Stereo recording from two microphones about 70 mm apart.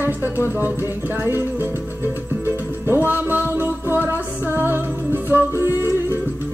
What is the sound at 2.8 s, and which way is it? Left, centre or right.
Music, right.